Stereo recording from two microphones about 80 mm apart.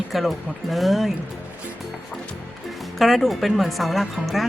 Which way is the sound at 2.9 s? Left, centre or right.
Centre.